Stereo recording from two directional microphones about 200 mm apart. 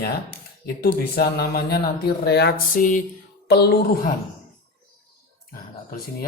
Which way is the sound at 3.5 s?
55° left (ahead or behind).